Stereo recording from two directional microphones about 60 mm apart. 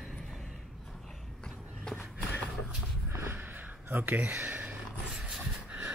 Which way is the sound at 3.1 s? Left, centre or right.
Right.